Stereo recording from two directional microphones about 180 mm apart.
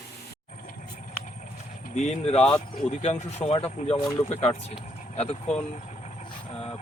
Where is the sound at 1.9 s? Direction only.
40° left (ahead or behind).